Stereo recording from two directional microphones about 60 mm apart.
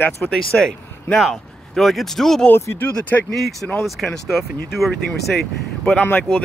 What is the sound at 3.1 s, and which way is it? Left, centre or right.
Speech, left.